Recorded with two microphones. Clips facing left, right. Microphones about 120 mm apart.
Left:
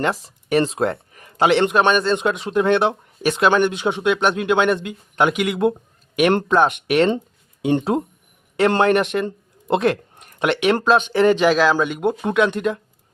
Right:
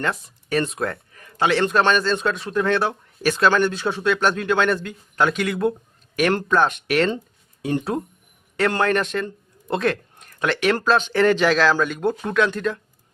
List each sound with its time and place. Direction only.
0.4 s a man's voice: 25° left (ahead or behind)